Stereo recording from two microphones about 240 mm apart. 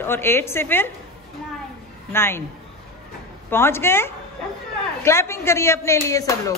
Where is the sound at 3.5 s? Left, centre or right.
Centre.